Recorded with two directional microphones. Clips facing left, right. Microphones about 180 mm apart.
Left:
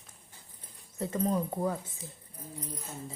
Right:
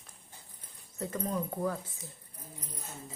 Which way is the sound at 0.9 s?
25° left (ahead or behind).